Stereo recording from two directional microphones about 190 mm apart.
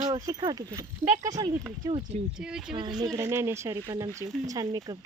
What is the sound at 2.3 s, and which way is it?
Speech, 5° right (ahead or behind).